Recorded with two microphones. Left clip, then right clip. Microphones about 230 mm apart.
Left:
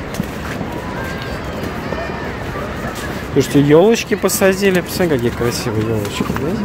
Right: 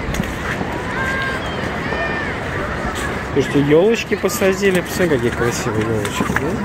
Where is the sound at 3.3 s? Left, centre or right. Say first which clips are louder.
Left 3 dB; left; by 5.7 s centre.